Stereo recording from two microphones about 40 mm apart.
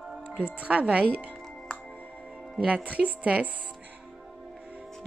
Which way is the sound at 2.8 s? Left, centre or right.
Right.